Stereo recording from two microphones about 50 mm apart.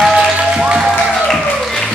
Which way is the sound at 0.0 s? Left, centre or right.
Centre.